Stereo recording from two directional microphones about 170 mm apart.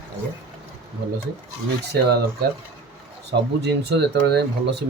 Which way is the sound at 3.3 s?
80° right.